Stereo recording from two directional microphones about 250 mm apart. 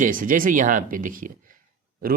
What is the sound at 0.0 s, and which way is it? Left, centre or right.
Speech, right.